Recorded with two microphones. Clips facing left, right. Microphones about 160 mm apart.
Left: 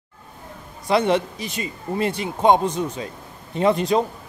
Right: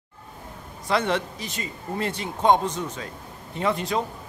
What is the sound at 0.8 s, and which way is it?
A man's voice, 15° left (ahead or behind).